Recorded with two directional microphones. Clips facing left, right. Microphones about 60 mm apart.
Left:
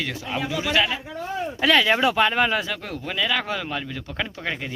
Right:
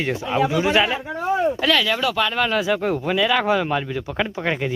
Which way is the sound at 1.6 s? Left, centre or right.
Centre.